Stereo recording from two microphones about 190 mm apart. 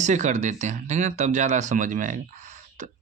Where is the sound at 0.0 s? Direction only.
40° right (ahead or behind).